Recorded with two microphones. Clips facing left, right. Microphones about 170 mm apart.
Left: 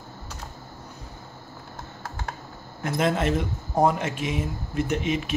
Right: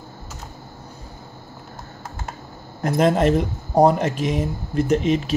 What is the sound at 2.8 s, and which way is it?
Speech, 40° right (ahead or behind).